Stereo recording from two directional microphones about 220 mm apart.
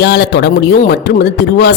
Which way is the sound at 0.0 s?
50° left (ahead or behind).